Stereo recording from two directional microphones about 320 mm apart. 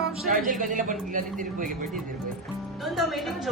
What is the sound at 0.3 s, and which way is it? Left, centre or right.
Speech, right.